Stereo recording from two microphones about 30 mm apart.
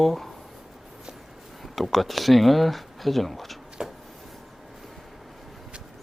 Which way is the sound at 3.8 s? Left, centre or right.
Right.